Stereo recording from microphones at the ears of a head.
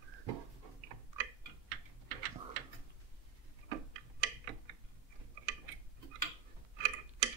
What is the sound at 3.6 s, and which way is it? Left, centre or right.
Tick-tock, right.